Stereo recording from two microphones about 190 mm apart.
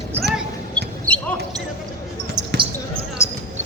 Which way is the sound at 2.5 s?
65° right (ahead or behind).